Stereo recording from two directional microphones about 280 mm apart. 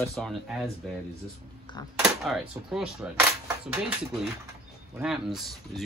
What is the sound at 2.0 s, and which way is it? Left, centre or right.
Speech, centre.